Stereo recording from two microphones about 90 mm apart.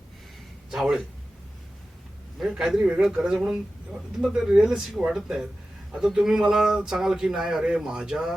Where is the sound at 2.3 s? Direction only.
5° right (ahead or behind).